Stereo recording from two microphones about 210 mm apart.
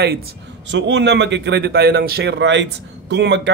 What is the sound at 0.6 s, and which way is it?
A man's voice, 60° right (ahead or behind).